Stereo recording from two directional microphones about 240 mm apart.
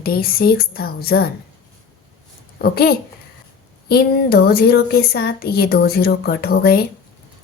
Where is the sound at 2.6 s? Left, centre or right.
Left.